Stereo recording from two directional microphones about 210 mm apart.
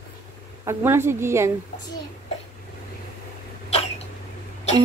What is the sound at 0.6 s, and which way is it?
Speech, 15° right (ahead or behind).